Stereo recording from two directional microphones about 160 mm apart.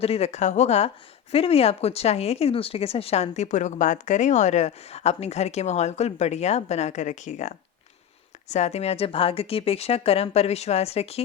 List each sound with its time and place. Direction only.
0.0 s speech: 40° left (ahead or behind)